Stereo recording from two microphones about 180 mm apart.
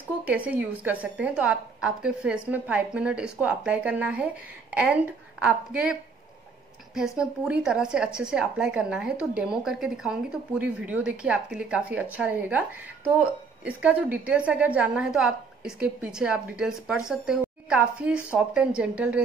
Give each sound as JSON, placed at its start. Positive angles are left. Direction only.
{"t": 0.5, "sound": "speech", "side_deg": -10}